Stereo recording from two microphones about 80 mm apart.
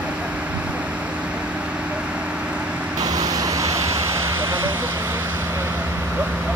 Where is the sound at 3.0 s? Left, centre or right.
Right.